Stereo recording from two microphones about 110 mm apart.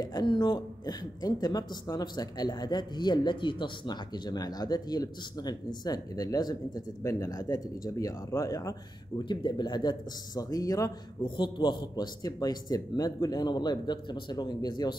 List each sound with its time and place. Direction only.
0.0 s a woman's voice: 40° left (ahead or behind)
11.2 s a woman's voice: 50° left (ahead or behind)